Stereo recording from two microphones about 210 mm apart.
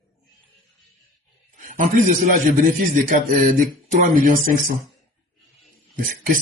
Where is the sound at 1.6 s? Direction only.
40° right (ahead or behind).